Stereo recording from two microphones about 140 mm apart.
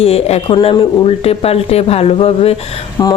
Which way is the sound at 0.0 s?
45° left (ahead or behind).